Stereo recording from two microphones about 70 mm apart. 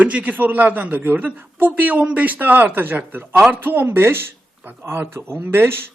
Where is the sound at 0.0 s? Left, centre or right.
Centre.